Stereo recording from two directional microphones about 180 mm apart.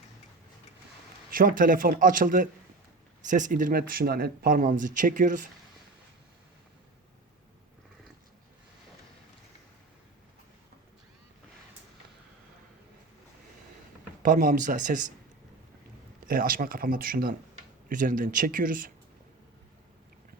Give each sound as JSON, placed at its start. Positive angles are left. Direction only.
{"t": 1.3, "sound": "speech", "side_deg": -50}
{"t": 14.2, "sound": "speech", "side_deg": -50}
{"t": 16.2, "sound": "speech", "side_deg": -50}